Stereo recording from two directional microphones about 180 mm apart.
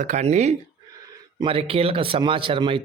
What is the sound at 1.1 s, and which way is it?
Speech, 30° right (ahead or behind).